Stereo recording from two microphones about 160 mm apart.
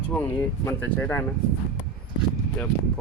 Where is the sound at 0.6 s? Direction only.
10° left (ahead or behind).